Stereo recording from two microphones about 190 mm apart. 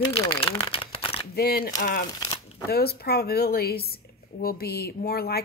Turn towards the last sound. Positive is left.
turn(degrees=55)  # may be behind; listen again after turning